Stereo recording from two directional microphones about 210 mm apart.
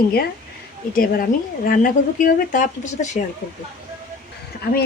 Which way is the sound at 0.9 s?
45° left (ahead or behind).